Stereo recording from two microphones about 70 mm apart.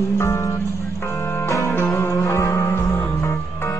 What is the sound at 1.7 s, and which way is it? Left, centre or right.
Music, left.